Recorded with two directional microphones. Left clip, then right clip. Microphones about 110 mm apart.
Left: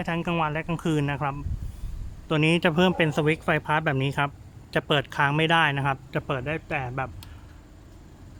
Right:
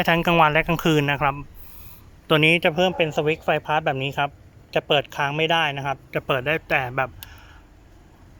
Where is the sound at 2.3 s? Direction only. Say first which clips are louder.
Right 7 dB; 65° right (ahead or behind).